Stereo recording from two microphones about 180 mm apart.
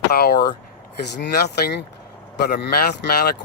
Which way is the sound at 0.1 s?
60° left (ahead or behind).